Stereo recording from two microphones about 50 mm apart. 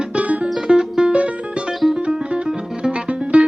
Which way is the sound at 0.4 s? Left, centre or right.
Centre.